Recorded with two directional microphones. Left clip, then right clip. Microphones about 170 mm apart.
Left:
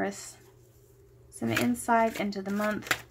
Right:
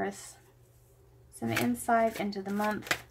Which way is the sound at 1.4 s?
15° left (ahead or behind).